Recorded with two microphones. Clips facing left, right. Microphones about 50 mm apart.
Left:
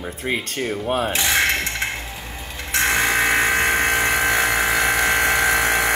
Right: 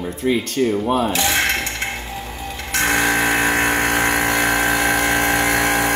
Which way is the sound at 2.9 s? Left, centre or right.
Right.